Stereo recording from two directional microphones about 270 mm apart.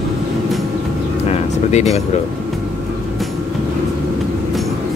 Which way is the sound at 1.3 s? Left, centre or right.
Left.